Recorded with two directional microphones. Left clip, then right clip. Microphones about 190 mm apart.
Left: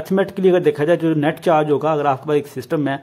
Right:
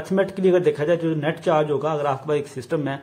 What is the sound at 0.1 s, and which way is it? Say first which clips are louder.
Speech: left 3 dB; 25° left (ahead or behind).